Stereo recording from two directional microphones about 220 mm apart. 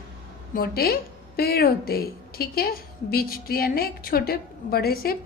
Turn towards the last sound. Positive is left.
turn(degrees=40)  # may be behind; listen again after turning